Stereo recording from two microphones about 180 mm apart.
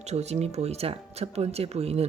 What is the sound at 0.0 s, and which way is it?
A woman's voice, 40° right (ahead or behind).